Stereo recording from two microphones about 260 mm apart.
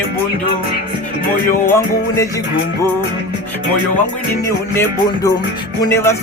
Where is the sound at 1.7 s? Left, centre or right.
Centre.